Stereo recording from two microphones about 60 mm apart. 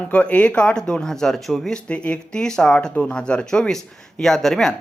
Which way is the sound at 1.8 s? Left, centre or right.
Left.